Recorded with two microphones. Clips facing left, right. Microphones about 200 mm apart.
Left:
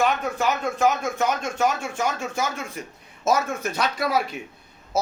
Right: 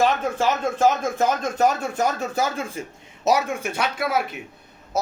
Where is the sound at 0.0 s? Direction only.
30° right (ahead or behind).